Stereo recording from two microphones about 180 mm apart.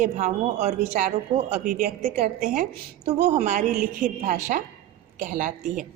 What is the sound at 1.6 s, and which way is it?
A woman's voice, 50° right (ahead or behind).